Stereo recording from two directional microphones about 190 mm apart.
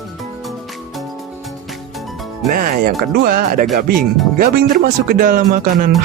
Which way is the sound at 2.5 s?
45° right (ahead or behind).